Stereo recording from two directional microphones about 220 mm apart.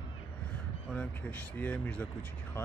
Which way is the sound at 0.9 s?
5° left (ahead or behind).